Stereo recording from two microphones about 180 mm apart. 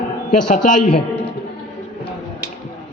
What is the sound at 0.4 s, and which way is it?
Speech, 45° left (ahead or behind).